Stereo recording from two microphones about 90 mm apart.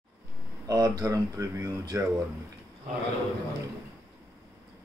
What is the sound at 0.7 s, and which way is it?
Speech, 40° right (ahead or behind).